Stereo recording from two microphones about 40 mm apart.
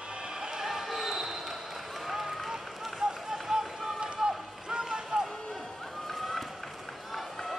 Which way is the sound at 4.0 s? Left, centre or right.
Right.